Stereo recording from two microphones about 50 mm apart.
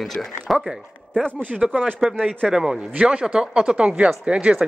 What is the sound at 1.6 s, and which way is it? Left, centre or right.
Speech, centre.